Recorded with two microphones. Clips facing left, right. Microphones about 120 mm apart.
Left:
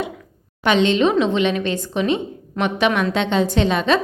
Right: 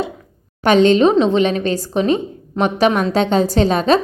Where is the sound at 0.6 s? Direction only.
40° right (ahead or behind).